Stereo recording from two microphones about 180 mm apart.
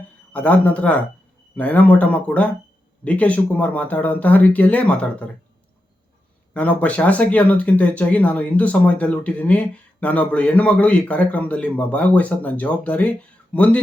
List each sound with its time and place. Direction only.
0.3 s speech: 10° left (ahead or behind)
6.5 s speech: 10° left (ahead or behind)